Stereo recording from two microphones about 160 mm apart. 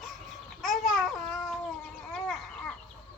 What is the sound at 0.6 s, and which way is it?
Babbling, centre (ahead or behind).